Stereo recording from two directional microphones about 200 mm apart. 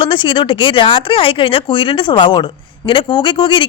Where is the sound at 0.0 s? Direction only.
25° left (ahead or behind).